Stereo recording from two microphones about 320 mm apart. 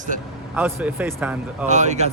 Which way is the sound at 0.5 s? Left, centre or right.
Centre.